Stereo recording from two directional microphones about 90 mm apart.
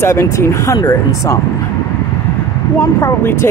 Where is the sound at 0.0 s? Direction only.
30° left (ahead or behind).